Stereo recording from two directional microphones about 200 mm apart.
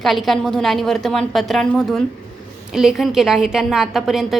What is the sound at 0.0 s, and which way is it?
A woman's voice, centre (ahead or behind).